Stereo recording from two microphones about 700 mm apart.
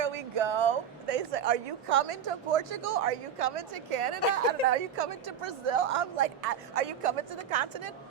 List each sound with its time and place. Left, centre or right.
0.0 s a woman's voice: right